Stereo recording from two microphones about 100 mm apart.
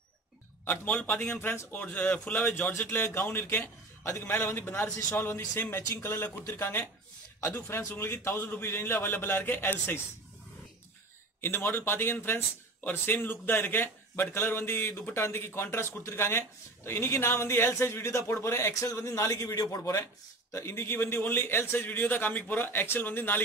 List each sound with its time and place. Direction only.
0.7 s a man's voice: 20° left (ahead or behind)
11.4 s a man's voice: 25° left (ahead or behind)